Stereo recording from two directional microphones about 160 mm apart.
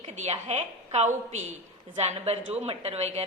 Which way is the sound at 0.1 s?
45° right (ahead or behind).